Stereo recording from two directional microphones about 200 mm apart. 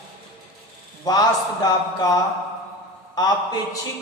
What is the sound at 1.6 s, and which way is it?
Speech, 20° left (ahead or behind).